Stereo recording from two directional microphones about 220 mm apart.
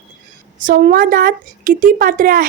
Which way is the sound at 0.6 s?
40° right (ahead or behind).